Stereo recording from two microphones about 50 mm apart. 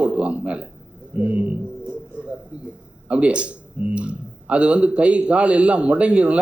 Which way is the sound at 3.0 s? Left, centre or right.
Right.